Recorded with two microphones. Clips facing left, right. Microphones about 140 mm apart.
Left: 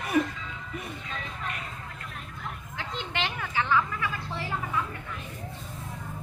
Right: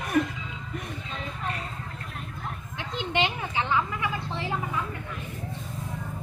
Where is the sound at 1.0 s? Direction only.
30° right (ahead or behind).